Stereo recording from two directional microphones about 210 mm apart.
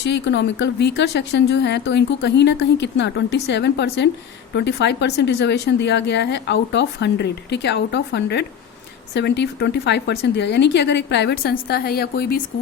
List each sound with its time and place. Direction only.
0.0 s speech: 55° left (ahead or behind)